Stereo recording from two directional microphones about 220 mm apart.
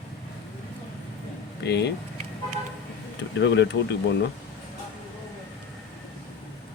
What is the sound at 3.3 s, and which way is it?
Speech, 55° left (ahead or behind).